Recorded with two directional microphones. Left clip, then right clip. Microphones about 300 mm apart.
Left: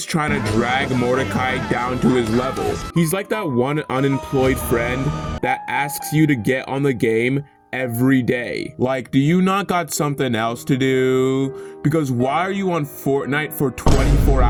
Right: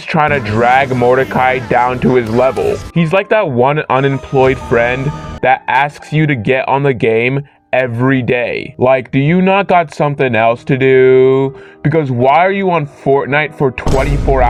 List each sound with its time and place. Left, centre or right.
0.4 s speech: centre
2.9 s speech: left
4.1 s speech: centre
5.4 s speech: left
13.8 s speech: centre